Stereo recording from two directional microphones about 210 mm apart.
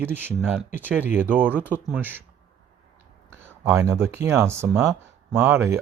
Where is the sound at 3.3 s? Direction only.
10° right (ahead or behind).